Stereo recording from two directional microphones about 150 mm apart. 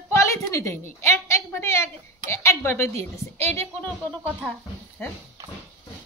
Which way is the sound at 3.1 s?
15° left (ahead or behind).